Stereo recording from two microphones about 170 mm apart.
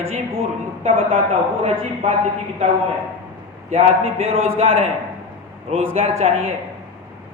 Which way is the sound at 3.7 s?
35° right (ahead or behind).